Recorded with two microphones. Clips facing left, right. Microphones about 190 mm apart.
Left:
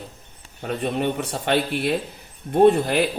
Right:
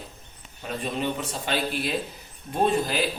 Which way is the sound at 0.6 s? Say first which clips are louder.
Left 5 dB; 60° left (ahead or behind).